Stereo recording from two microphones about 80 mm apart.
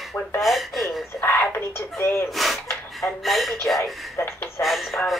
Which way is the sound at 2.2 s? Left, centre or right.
Centre.